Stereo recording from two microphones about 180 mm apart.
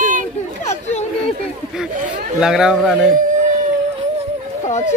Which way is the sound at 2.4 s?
5° right (ahead or behind).